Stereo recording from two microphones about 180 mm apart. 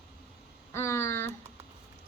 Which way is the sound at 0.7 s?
15° left (ahead or behind).